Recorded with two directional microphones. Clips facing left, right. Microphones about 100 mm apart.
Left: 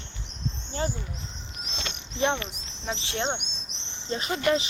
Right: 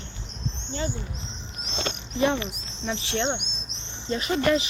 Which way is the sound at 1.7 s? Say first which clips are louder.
Right 7 dB; 50° right (ahead or behind).